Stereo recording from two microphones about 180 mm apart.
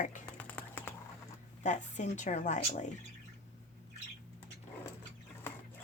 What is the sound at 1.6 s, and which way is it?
A woman's voice, 40° left (ahead or behind).